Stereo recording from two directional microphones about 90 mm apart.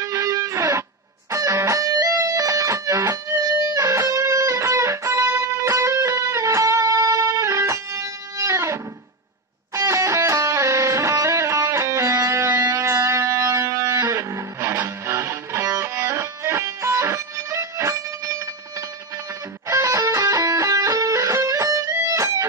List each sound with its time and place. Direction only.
0.0 s music: 35° right (ahead or behind)
9.8 s music: 35° right (ahead or behind)